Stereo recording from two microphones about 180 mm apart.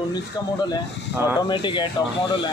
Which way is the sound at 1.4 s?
25° left (ahead or behind).